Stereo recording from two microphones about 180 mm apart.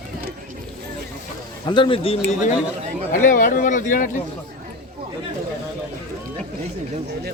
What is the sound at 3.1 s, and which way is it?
Speech, 45° left (ahead or behind).